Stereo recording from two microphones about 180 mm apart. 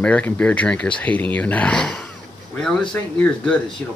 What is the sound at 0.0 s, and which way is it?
Speech, 5° left (ahead or behind).